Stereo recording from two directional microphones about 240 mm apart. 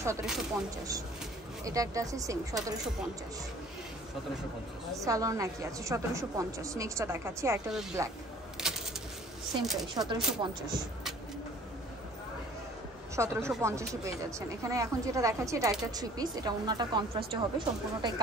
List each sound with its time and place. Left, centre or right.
0.2 s speech: centre
1.6 s a woman's voice: centre
4.9 s a woman's voice: centre
8.5 s a sound: centre
9.6 s speech: centre
9.9 s a woman's voice: centre
13.1 s a woman's voice: centre